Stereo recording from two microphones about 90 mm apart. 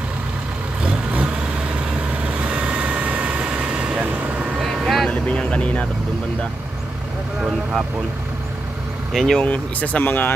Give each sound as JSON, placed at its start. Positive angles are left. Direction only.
{"t": 0.8, "sound": "vehicle", "side_deg": -15}
{"t": 4.6, "sound": "vehicle", "side_deg": 0}
{"t": 9.1, "sound": "speech", "side_deg": 5}
{"t": 9.5, "sound": "speech", "side_deg": 15}